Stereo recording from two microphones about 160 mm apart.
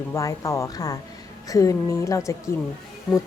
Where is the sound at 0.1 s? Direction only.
20° left (ahead or behind).